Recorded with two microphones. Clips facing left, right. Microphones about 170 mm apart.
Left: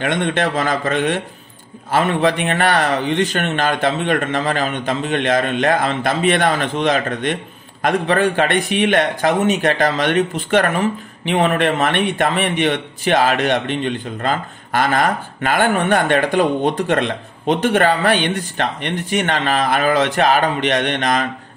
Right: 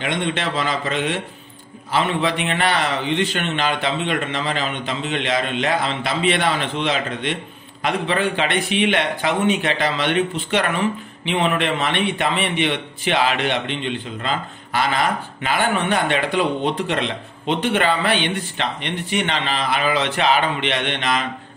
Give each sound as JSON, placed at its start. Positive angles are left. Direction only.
{"t": 0.0, "sound": "a man's voice", "side_deg": 50}